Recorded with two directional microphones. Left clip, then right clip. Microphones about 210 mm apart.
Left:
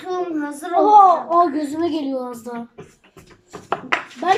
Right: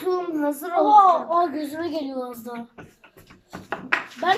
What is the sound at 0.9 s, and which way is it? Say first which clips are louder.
A woman's voice: left 4 dB; 10° left (ahead or behind).